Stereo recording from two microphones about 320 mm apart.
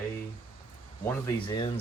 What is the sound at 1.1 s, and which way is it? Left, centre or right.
Speech, centre.